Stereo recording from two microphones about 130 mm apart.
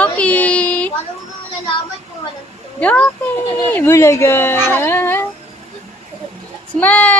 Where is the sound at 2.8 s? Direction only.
10° left (ahead or behind).